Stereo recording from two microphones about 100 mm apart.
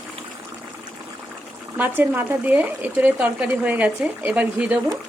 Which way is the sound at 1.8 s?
20° right (ahead or behind).